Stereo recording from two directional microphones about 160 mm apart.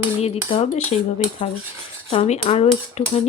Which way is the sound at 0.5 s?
45° left (ahead or behind).